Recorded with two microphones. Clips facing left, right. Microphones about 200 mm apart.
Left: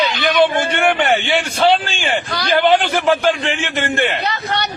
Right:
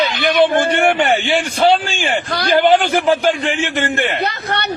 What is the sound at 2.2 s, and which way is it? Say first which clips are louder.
Speech: right 4 dB; 55° right (ahead or behind).